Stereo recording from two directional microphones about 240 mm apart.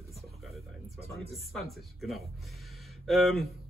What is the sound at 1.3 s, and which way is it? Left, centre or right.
A man's voice, centre.